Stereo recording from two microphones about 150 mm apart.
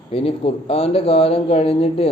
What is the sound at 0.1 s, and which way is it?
A man's voice, 40° left (ahead or behind).